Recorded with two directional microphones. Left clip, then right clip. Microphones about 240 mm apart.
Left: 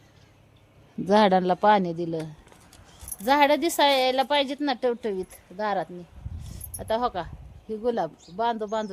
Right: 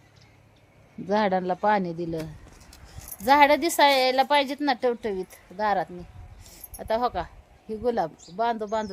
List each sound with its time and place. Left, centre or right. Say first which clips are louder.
1.0 s speech: left 4 dB; left
2.0 s speech: left 1 dB; centre
3.2 s a woman's voice: right 2 dB; centre